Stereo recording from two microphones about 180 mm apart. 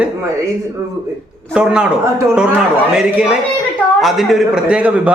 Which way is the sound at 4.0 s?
Centre (ahead or behind).